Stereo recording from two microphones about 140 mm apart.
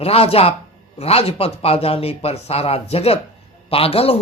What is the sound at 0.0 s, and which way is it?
Music, 45° left (ahead or behind).